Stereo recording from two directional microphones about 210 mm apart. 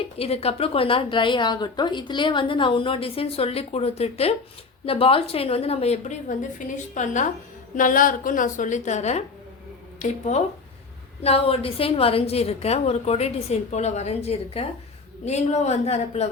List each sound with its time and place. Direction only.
0.2 s a woman's voice: 30° left (ahead or behind)